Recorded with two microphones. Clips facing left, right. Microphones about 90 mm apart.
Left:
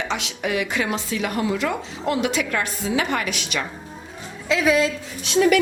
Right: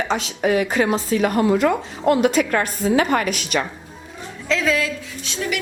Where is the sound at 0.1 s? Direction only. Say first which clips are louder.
Right 5 dB; 40° right (ahead or behind).